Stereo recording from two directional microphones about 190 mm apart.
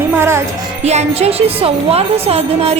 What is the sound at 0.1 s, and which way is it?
Music, 15° right (ahead or behind).